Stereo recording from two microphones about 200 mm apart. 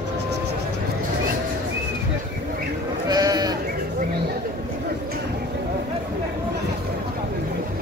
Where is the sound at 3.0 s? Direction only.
20° right (ahead or behind).